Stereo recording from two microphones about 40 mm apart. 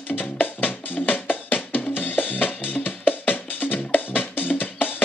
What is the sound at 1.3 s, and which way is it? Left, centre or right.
Drum, left.